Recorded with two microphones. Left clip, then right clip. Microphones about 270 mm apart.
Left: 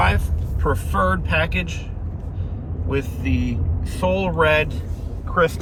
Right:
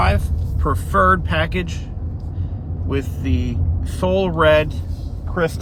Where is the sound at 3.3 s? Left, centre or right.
Right.